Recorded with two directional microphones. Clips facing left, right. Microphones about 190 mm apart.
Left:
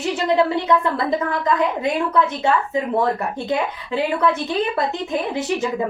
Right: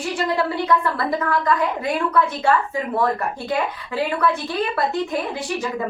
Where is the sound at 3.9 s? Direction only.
20° left (ahead or behind).